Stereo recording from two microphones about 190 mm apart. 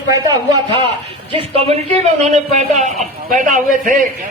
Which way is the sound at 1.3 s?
30° right (ahead or behind).